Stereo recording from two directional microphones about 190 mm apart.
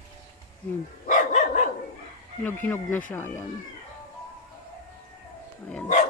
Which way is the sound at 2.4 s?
10° left (ahead or behind).